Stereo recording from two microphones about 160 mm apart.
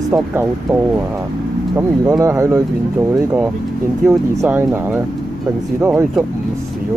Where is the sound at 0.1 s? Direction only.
15° right (ahead or behind).